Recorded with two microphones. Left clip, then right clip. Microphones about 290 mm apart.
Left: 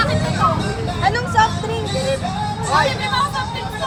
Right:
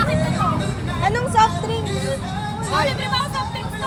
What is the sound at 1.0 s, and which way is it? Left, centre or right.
Vehicle, right.